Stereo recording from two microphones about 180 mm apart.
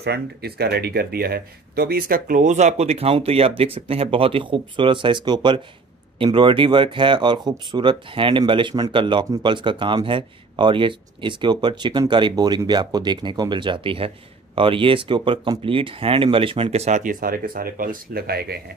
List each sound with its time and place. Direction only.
0.0 s speech: 65° right (ahead or behind)